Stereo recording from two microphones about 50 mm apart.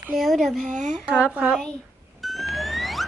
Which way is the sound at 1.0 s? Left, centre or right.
Centre.